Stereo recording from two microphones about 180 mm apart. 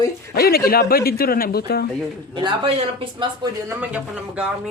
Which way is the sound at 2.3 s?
25° right (ahead or behind).